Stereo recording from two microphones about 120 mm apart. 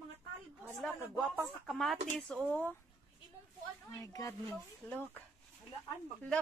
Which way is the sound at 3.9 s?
30° left (ahead or behind).